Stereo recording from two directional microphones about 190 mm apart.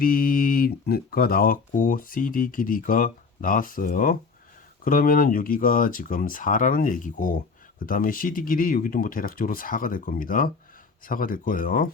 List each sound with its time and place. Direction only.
0.0 s speech: 45° left (ahead or behind)